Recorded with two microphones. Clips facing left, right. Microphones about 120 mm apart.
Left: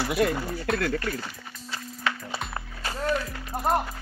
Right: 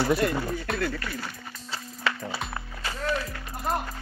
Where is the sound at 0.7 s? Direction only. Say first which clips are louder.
Left 7 dB; centre (ahead or behind).